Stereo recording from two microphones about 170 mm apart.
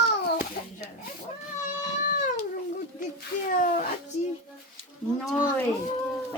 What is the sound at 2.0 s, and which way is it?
Cat, 50° left (ahead or behind).